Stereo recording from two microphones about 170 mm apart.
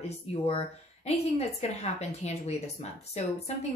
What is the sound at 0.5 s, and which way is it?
A woman's voice, 35° left (ahead or behind).